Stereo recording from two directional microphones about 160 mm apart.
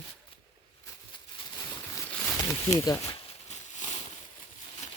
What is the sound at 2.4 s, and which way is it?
Speech, 20° left (ahead or behind).